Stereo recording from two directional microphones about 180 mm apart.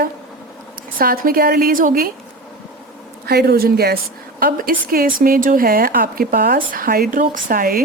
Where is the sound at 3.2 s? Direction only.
65° right (ahead or behind).